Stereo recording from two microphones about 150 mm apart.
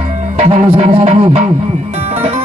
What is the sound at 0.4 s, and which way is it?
Music, 40° right (ahead or behind).